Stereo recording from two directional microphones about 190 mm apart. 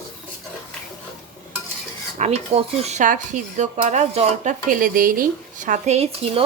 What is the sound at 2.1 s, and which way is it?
Speech, 35° right (ahead or behind).